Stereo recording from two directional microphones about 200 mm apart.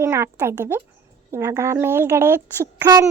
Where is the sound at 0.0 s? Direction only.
10° right (ahead or behind).